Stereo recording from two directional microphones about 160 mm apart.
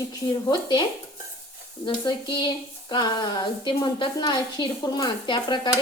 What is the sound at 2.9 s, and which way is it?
A woman's voice, 25° left (ahead or behind).